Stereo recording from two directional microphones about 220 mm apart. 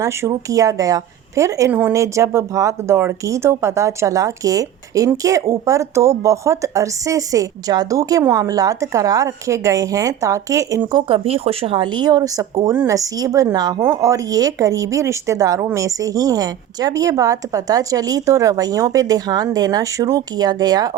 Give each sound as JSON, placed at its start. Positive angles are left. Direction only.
{"t": 0.0, "sound": "speech", "side_deg": -15}